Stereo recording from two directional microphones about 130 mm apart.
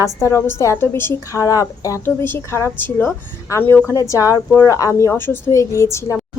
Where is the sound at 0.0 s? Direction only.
20° left (ahead or behind).